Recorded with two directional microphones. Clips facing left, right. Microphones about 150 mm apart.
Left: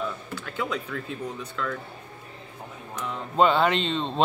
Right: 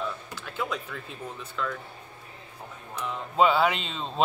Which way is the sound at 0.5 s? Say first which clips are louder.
Left 2 dB; centre (ahead or behind).